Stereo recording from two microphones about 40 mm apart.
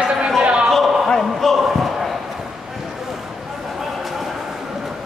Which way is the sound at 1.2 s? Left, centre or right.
Centre.